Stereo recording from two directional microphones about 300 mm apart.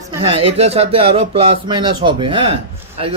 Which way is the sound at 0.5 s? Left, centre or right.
Centre.